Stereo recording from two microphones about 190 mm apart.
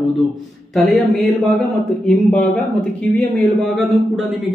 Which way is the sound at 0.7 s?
Centre (ahead or behind).